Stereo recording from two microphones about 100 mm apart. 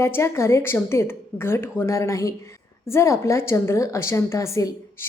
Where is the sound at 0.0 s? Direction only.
25° left (ahead or behind).